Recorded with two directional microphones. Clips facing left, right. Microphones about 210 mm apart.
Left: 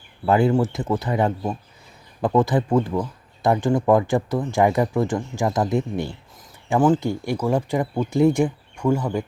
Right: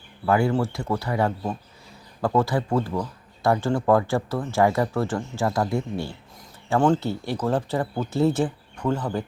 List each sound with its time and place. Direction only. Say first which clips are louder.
0.3 s speech: left 3 dB; 20° left (ahead or behind)
6.7 s speech: left 2 dB; 5° left (ahead or behind)